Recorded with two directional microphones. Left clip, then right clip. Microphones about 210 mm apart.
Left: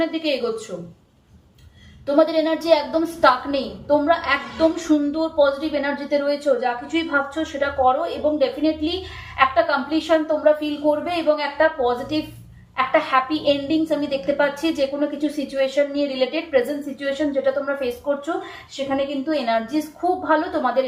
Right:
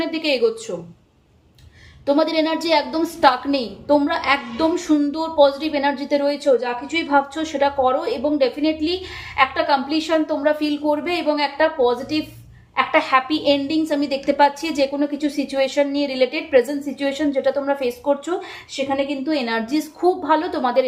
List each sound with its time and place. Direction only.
0.0 s a woman's voice: 50° right (ahead or behind)
2.0 s a woman's voice: 50° right (ahead or behind)